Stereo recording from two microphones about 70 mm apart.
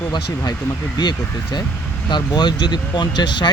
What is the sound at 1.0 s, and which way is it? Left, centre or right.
Speech, left.